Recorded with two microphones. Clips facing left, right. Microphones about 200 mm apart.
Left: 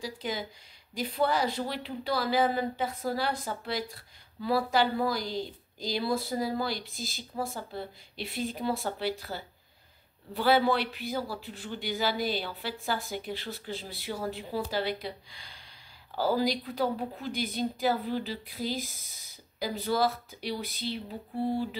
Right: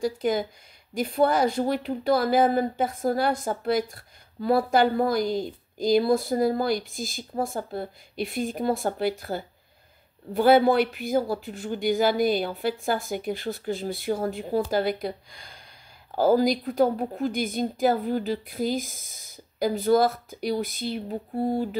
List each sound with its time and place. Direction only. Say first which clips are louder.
0.0 s speech: right 10 dB; 50° right (ahead or behind)